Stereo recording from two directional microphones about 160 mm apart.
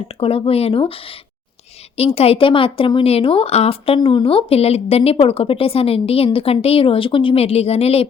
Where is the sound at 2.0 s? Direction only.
40° left (ahead or behind).